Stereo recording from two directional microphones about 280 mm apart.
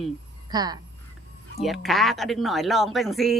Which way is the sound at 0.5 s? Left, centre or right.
Centre.